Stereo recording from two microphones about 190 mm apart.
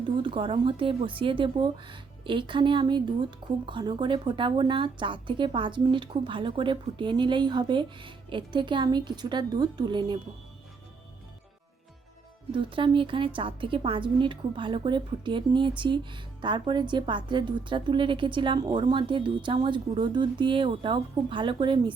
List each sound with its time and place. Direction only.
0.2 s a woman's voice: 25° right (ahead or behind)
12.5 s a woman's voice: 25° right (ahead or behind)